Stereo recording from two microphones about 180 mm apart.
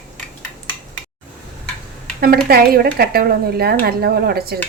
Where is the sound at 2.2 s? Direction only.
60° right (ahead or behind).